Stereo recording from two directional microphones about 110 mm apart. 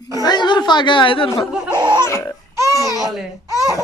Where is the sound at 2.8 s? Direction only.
30° right (ahead or behind).